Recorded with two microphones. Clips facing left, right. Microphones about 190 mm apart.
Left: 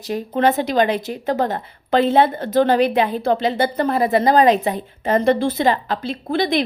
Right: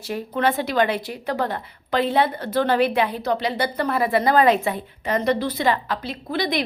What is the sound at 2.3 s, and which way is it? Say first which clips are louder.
Speech: left 5 dB; 45° left (ahead or behind).